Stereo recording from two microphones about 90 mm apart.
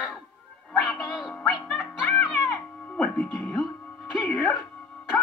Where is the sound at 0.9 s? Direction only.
5° right (ahead or behind).